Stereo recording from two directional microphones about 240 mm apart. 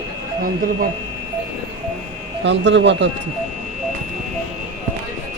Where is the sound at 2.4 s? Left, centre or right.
Right.